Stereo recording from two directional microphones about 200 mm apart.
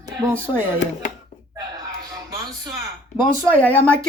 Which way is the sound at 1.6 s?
20° right (ahead or behind).